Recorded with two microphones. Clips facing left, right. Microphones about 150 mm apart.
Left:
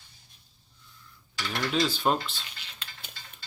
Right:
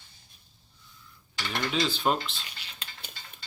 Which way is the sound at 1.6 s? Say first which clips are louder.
Left 1 dB; centre (ahead or behind).